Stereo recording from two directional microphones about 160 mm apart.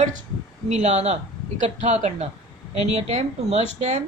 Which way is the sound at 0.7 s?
45° right (ahead or behind).